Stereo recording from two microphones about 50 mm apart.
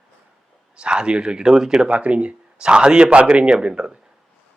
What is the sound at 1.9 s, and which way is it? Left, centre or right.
Speech, right.